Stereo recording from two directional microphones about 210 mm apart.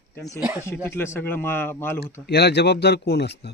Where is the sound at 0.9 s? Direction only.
10° left (ahead or behind).